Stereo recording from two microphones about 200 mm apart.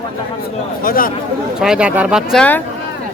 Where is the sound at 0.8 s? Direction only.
45° left (ahead or behind).